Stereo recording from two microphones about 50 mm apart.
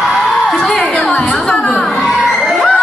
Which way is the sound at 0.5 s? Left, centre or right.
Centre.